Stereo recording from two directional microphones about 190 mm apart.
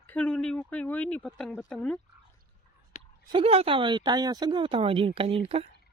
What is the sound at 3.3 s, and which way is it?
Speech, 30° right (ahead or behind).